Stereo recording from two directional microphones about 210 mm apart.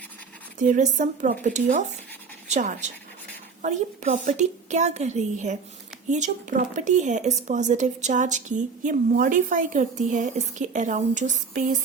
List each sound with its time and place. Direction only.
0.6 s speech: 35° right (ahead or behind)